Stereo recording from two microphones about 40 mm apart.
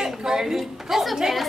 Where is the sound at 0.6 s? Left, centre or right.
Centre.